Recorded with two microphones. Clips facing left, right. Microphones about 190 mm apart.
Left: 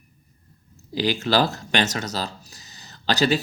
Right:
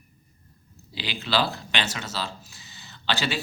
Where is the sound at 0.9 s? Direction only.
45° left (ahead or behind).